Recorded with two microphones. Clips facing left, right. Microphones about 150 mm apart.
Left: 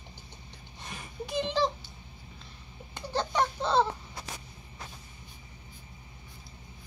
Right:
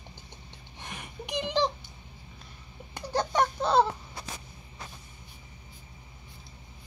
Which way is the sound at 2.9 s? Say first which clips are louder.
Right 2 dB; 15° right (ahead or behind).